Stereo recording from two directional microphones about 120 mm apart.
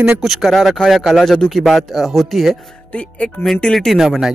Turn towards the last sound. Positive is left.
turn(degrees=-5)  # may be behind; listen again after turning